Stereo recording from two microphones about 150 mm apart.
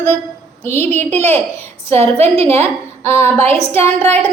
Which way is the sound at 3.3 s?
40° right (ahead or behind).